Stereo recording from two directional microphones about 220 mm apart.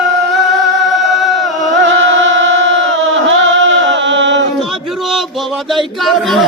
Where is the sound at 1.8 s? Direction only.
55° right (ahead or behind).